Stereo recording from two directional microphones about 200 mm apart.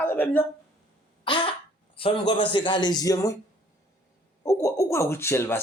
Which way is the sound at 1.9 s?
25° left (ahead or behind).